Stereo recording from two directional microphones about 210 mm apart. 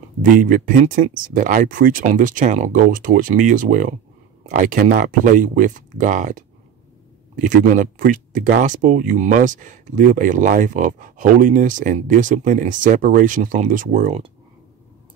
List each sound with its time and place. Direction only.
0.2 s speech: 40° right (ahead or behind)